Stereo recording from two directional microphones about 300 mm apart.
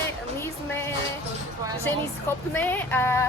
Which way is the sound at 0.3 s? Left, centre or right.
Centre.